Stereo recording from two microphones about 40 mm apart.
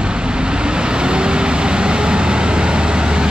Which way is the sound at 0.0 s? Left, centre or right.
Right.